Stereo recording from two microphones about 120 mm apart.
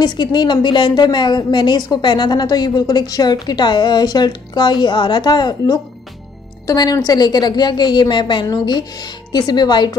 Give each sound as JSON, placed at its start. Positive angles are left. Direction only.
{"t": 0.0, "sound": "a woman's voice", "side_deg": 35}